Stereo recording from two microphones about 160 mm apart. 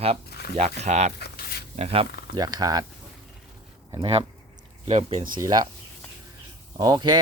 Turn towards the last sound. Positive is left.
turn(degrees=-25)  # may be behind; listen again after turning